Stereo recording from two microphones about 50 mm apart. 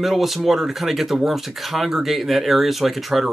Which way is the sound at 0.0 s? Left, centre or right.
Centre.